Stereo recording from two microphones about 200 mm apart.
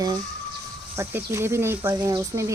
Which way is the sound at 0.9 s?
15° right (ahead or behind).